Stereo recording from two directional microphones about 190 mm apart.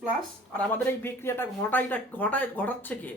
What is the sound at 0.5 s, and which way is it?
Speech, 10° left (ahead or behind).